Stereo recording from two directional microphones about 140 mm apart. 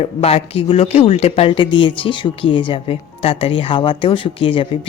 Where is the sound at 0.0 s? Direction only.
45° left (ahead or behind).